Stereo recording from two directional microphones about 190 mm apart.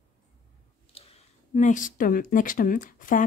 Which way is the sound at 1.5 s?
40° left (ahead or behind).